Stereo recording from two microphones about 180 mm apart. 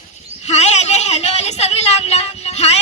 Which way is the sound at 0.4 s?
40° left (ahead or behind).